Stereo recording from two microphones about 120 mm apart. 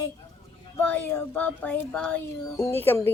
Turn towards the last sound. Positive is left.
turn(degrees=20)  # may be behind; listen again after turning